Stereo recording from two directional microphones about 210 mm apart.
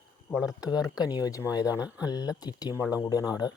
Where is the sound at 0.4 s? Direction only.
15° left (ahead or behind).